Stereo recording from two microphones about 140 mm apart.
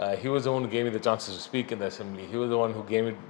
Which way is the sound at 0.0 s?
10° left (ahead or behind).